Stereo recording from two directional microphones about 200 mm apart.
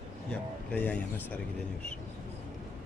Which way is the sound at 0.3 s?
5° left (ahead or behind).